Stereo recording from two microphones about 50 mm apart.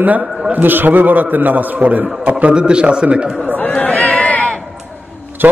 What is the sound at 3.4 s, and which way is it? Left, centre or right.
Chatter, left.